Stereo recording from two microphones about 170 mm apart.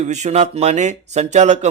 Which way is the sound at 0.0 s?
45° right (ahead or behind).